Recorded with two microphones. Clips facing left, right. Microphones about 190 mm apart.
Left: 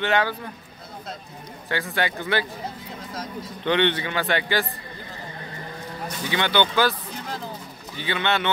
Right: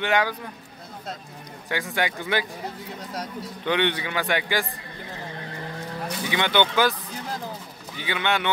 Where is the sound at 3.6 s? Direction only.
10° right (ahead or behind).